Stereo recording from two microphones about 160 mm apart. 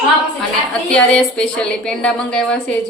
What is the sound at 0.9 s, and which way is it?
A woman's voice, 5° left (ahead or behind).